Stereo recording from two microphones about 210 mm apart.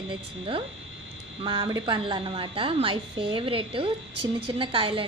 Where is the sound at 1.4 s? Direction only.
20° right (ahead or behind).